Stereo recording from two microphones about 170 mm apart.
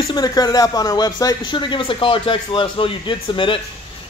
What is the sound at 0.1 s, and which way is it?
Speech, 20° left (ahead or behind).